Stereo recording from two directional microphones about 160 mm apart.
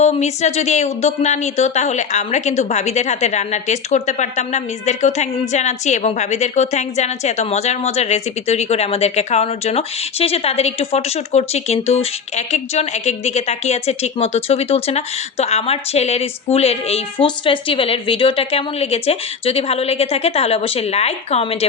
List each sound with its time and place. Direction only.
0.0 s speech: 45° left (ahead or behind)